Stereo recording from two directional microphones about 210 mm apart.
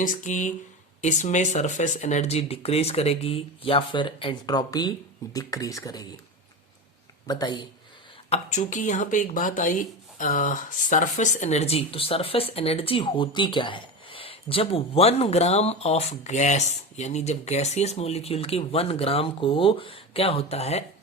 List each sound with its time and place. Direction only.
0.0 s speech: 40° left (ahead or behind); by 6.1 s 15° left (ahead or behind)
7.3 s speech: 20° left (ahead or behind)
8.3 s speech: 35° left (ahead or behind)